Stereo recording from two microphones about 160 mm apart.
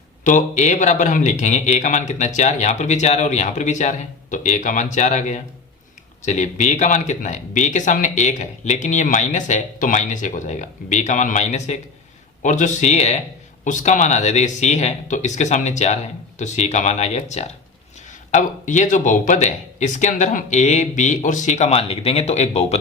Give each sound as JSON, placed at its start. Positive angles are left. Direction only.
{"t": 0.3, "sound": "speech", "side_deg": 50}